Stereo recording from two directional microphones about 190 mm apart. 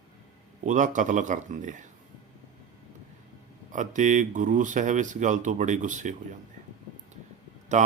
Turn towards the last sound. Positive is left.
turn(degrees=-40)  # may be behind; listen again after turning